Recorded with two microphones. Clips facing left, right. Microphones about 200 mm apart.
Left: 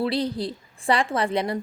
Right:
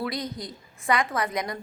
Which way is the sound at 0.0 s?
30° left (ahead or behind).